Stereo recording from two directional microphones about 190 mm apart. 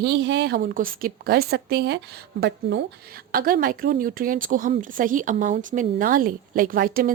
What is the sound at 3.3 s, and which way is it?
A woman's voice, 50° right (ahead or behind).